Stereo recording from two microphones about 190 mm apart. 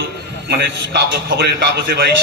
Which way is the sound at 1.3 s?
55° right (ahead or behind).